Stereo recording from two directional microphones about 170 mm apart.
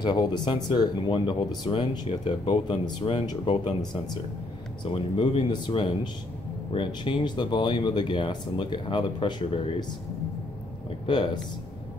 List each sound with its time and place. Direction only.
0.0 s speech: 25° left (ahead or behind)